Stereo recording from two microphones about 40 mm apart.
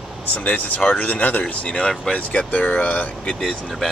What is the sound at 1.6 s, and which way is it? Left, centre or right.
Speech, left.